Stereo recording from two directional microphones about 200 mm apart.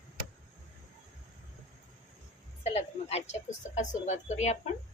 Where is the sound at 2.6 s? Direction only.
30° left (ahead or behind).